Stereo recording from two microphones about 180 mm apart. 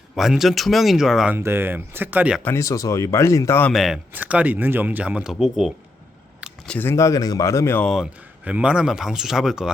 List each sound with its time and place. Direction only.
0.2 s speech: centre (ahead or behind)
2.4 s speech: 15° left (ahead or behind)
3.7 s speech: centre (ahead or behind)
7.9 s speech: 5° right (ahead or behind)